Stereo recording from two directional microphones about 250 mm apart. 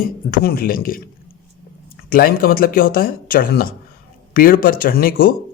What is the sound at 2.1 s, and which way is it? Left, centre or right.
A man's voice, left.